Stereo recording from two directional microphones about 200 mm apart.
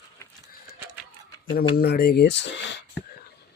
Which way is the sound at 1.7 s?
50° left (ahead or behind).